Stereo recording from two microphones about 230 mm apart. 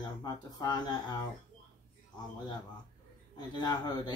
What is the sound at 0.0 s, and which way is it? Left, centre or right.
Speech, centre.